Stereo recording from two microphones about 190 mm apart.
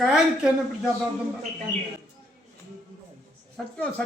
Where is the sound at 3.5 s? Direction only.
5° left (ahead or behind).